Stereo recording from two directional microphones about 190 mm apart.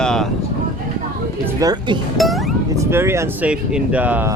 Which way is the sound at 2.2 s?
Centre (ahead or behind).